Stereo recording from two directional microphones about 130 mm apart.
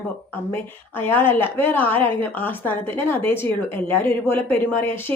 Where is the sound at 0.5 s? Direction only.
15° left (ahead or behind).